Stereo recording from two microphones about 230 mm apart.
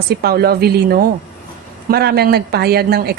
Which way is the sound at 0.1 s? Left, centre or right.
Right.